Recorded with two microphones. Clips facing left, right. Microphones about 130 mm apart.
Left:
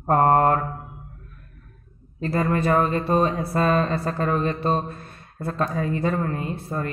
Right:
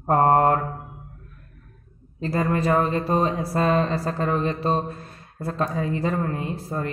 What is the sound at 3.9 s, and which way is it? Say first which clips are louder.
Speech: even; 35° right (ahead or behind).